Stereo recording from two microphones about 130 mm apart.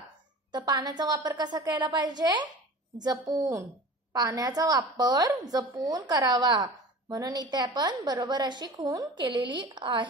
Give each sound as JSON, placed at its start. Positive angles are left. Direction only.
{"t": 0.5, "sound": "a woman's voice", "side_deg": -30}